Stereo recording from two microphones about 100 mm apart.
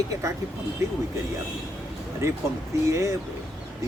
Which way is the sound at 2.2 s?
30° right (ahead or behind).